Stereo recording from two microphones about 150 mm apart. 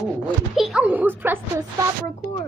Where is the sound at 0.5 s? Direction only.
5° right (ahead or behind).